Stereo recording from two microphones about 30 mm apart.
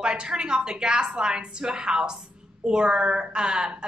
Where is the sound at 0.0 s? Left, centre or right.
Right.